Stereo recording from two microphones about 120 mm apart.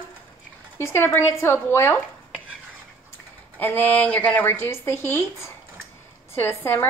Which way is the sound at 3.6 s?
15° left (ahead or behind).